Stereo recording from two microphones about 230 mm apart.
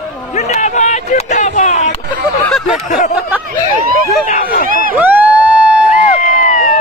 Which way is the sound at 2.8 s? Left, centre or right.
Left.